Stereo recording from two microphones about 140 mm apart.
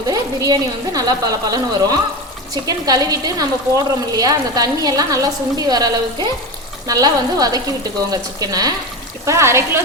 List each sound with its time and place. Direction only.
0.1 s a woman's voice: 25° right (ahead or behind)